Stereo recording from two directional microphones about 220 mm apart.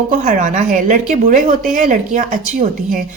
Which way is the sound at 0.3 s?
35° right (ahead or behind).